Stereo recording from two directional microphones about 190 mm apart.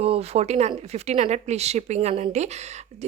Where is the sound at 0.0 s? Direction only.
30° right (ahead or behind).